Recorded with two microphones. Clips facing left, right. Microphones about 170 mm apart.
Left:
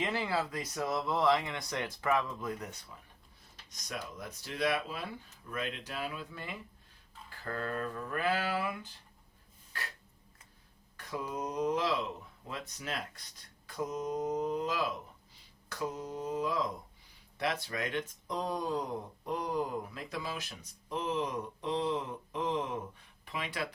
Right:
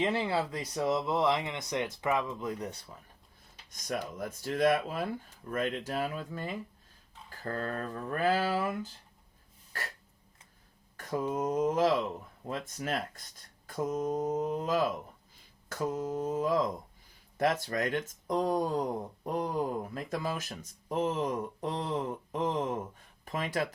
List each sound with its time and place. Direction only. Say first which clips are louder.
0.0 s speech: right 4 dB; 30° right (ahead or behind)
2.6 s speech: right 7 dB; 35° right (ahead or behind)
3.7 s speech: right 7 dB; 50° right (ahead or behind)
10.9 s a sound: right 6 dB; 45° right (ahead or behind)
11.3 s speech: right 4 dB; 50° right (ahead or behind)